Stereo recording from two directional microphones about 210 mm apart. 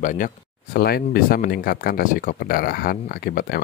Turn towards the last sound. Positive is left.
turn(degrees=45)  # may be behind; listen again after turning